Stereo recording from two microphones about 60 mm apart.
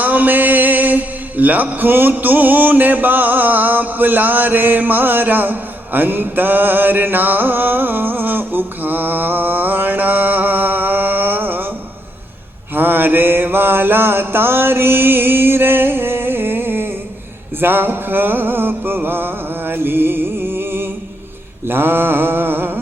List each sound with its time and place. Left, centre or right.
0.0 s mantra: right
12.7 s mantra: right
17.6 s music: right
21.7 s mantra: right